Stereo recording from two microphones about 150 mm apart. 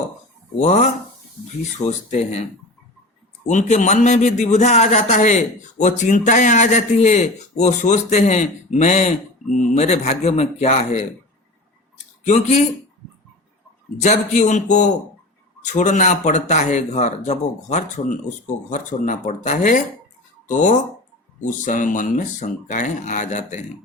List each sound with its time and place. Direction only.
0.6 s a man's voice: 50° left (ahead or behind)
1.9 s a man's voice: 45° left (ahead or behind)
3.4 s a man's voice: 55° left (ahead or behind)
12.2 s a man's voice: 50° left (ahead or behind)
14.0 s a man's voice: 50° left (ahead or behind)